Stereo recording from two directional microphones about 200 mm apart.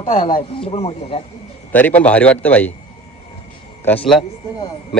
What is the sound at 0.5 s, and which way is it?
Speech, 30° left (ahead or behind).